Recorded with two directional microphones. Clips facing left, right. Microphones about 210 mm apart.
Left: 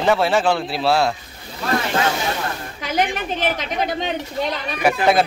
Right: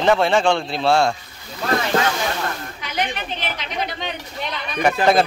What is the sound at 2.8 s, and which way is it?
A woman's voice, 45° left (ahead or behind).